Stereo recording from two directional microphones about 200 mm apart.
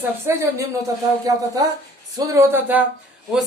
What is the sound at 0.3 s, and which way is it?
Speech, 15° right (ahead or behind).